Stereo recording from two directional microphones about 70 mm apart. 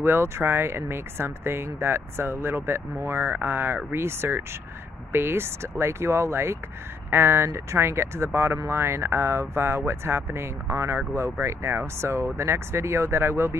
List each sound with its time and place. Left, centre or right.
0.0 s speech: right